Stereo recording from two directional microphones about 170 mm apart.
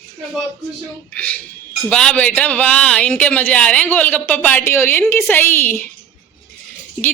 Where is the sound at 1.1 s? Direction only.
10° left (ahead or behind).